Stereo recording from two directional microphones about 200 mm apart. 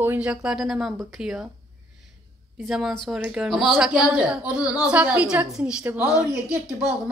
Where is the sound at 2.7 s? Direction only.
Centre (ahead or behind).